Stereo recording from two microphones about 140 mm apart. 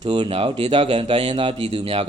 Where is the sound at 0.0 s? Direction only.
40° right (ahead or behind).